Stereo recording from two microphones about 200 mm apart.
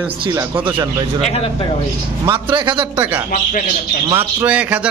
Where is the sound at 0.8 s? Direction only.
20° right (ahead or behind).